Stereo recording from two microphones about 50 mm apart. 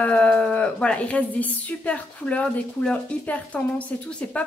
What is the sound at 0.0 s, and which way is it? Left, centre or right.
A woman's voice, left.